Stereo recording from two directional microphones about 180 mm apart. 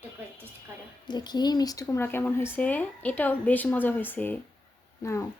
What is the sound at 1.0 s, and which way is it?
Speech, 25° left (ahead or behind).